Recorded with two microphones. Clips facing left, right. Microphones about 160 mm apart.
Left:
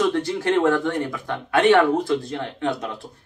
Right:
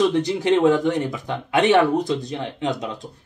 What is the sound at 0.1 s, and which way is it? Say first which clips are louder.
Speech: right 2 dB; 20° right (ahead or behind).